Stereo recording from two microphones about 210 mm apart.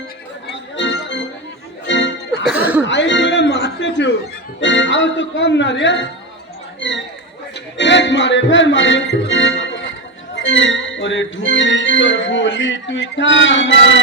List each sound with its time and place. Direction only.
0.8 s music: 60° left (ahead or behind)
2.4 s cough: 5° right (ahead or behind)
2.8 s a sound: 60° left (ahead or behind)
4.6 s organ: 60° left (ahead or behind)
6.7 s speech: 60° left (ahead or behind)
7.5 s music: 60° left (ahead or behind)
10.3 s organ: 65° left (ahead or behind)